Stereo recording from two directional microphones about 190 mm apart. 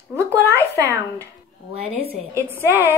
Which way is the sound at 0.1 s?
15° right (ahead or behind).